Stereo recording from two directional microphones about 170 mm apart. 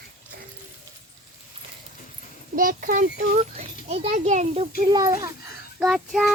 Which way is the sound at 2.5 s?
55° right (ahead or behind).